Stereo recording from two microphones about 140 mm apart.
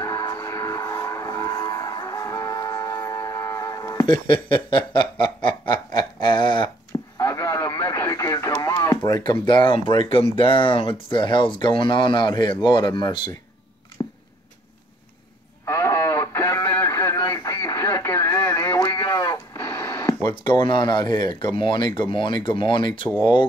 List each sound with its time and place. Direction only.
0.0 s vehicle: 25° left (ahead or behind)
4.6 s snicker: 35° left (ahead or behind)
7.2 s speech: 25° left (ahead or behind)
14.0 s a sound: 20° left (ahead or behind)
15.6 s a sound: 20° left (ahead or behind)
17.6 s radio: 20° left (ahead or behind)
20.4 s snicker: 35° left (ahead or behind)